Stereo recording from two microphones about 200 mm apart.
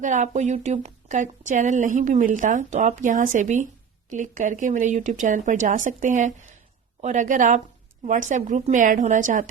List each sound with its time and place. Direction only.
0.0 s speech: 35° right (ahead or behind)